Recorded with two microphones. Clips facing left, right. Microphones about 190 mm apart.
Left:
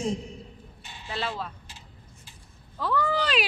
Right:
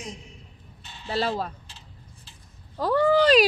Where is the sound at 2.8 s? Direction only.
40° right (ahead or behind).